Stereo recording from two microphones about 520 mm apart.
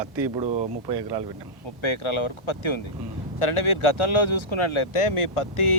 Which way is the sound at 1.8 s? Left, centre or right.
Left.